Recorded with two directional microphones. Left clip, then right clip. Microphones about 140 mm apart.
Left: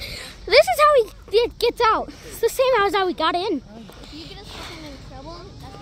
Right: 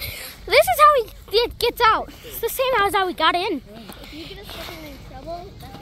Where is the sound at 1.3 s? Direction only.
20° left (ahead or behind).